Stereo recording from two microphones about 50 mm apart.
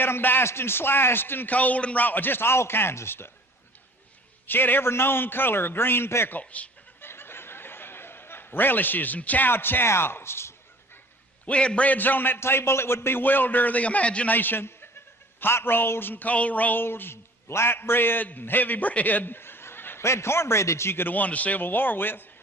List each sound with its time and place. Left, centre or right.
0.0 s a man's voice: left
0.4 s a man's voice: left
1.5 s a man's voice: left
4.4 s a man's voice: left
6.4 s a man's voice: left
7.0 s snicker: left
9.5 s a man's voice: left
11.4 s a man's voice: left
11.9 s a man's voice: left
12.4 s a man's voice: left
14.3 s a man's voice: left
16.8 s a man's voice: left
20.0 s a man's voice: left
21.1 s a man's voice: left